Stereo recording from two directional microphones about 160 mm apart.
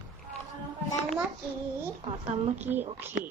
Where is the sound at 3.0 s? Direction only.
15° right (ahead or behind).